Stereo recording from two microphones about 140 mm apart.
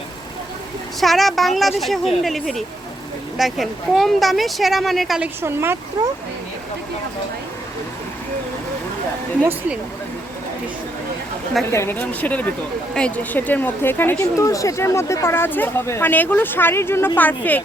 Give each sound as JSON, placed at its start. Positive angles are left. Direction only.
{"t": 0.9, "sound": "speech", "side_deg": 0}
{"t": 5.4, "sound": "speech", "side_deg": -15}
{"t": 11.7, "sound": "speech", "side_deg": 15}